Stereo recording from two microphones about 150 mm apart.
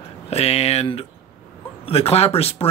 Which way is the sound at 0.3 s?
45° left (ahead or behind).